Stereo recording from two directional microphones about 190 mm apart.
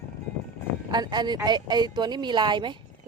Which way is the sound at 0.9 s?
20° right (ahead or behind).